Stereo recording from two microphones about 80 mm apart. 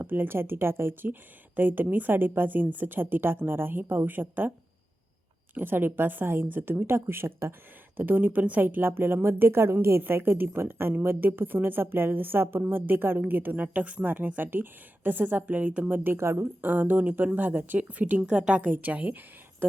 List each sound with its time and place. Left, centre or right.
0.0 s a woman's voice: right
5.5 s a woman's voice: right
7.9 s a woman's voice: right